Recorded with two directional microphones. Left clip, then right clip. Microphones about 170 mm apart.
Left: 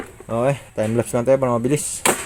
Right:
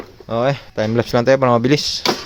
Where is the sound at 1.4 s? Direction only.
35° right (ahead or behind).